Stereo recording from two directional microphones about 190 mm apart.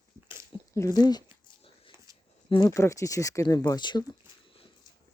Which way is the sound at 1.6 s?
30° left (ahead or behind).